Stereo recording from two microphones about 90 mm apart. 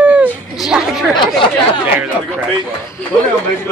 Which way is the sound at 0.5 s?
5° right (ahead or behind).